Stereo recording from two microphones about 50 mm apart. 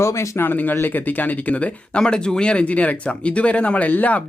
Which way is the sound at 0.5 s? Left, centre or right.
Left.